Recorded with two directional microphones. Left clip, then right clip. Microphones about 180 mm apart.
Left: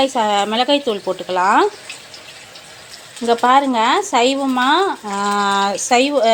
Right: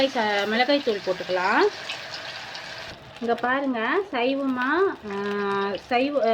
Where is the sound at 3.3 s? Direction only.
40° left (ahead or behind).